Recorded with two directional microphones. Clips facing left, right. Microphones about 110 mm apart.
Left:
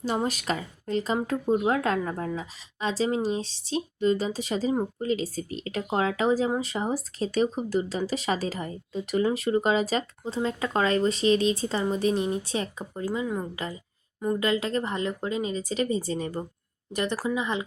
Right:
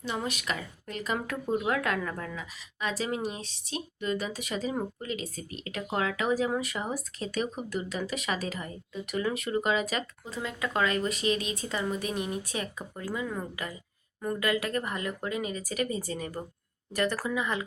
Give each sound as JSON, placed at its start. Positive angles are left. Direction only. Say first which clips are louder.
{"t": 0.0, "sound": "speech", "louder": "left 6 dB", "side_deg": 35}
{"t": 13.1, "sound": "speech", "louder": "left 4 dB", "side_deg": 20}